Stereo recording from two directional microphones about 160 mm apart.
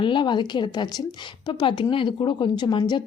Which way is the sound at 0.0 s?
30° left (ahead or behind).